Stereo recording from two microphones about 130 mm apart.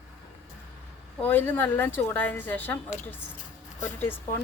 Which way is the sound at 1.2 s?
15° left (ahead or behind).